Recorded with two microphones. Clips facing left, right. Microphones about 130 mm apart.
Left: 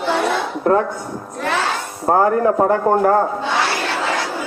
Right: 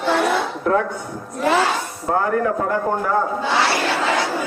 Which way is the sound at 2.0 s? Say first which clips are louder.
Left 6 dB; 40° left (ahead or behind).